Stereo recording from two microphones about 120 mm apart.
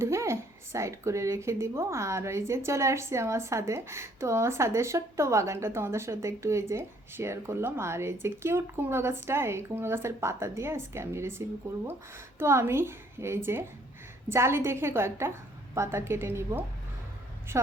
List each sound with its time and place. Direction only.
0.0 s speech: 25° right (ahead or behind)